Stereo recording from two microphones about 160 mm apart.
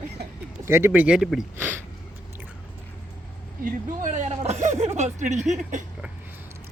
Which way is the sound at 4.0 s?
50° right (ahead or behind).